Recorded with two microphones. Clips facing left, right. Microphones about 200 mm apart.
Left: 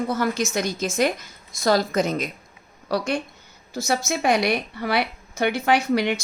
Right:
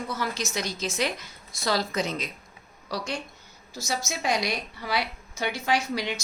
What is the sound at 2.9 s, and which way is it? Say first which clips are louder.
A woman's voice: left 8 dB; 60° left (ahead or behind).